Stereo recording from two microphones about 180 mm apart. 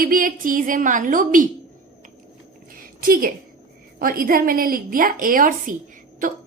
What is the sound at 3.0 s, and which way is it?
A woman's voice, 55° right (ahead or behind).